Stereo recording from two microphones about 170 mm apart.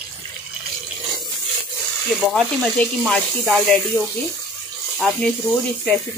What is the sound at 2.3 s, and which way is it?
Speech, centre (ahead or behind).